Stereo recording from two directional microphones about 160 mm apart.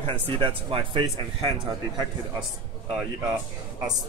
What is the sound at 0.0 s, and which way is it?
Speech, 35° right (ahead or behind).